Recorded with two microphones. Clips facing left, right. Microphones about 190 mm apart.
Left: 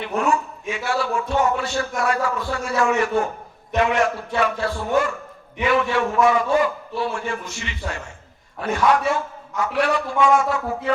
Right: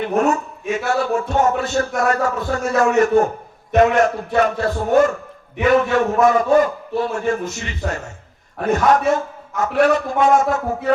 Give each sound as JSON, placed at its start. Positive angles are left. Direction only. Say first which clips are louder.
{"t": 0.0, "sound": "a man's voice", "louder": "right 4 dB", "side_deg": -45}